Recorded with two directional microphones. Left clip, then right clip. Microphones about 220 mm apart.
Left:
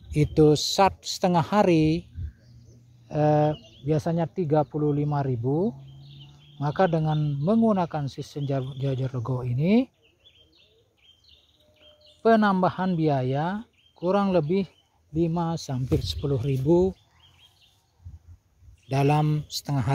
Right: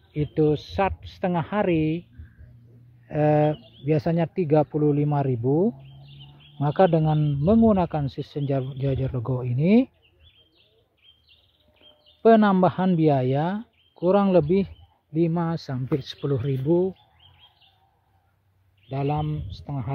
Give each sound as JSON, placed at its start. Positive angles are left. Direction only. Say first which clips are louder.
{"t": 0.1, "sound": "speech", "louder": "left 3 dB", "side_deg": 30}
{"t": 3.1, "sound": "speech", "louder": "right 1 dB", "side_deg": 0}
{"t": 12.2, "sound": "speech", "louder": "right 3 dB", "side_deg": -10}
{"t": 16.6, "sound": "speech", "louder": "left 1 dB", "side_deg": 20}
{"t": 18.9, "sound": "speech", "louder": "left 4 dB", "side_deg": 35}